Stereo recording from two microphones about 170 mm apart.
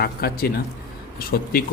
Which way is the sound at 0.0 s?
65° left (ahead or behind).